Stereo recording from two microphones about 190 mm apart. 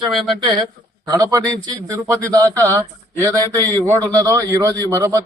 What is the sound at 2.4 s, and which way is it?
Speech, 10° left (ahead or behind).